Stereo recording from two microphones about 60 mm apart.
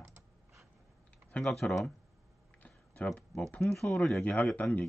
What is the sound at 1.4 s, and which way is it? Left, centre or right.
Speech, centre.